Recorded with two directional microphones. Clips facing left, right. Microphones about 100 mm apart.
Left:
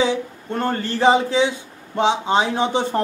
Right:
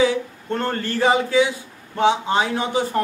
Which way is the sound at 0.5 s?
15° left (ahead or behind).